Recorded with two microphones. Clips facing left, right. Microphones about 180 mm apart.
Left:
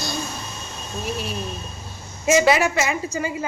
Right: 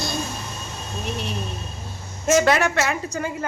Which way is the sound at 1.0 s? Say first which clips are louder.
Left 1 dB; 5° left (ahead or behind).